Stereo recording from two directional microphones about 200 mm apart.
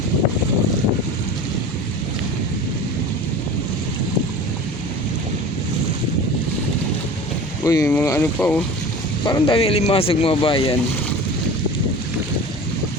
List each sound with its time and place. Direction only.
7.6 s speech: 15° left (ahead or behind)
9.2 s speech: 25° left (ahead or behind)